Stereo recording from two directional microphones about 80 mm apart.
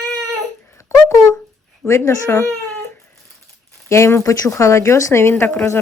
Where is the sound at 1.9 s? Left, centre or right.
Left.